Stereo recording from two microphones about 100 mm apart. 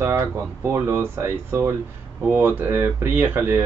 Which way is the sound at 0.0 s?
25° right (ahead or behind).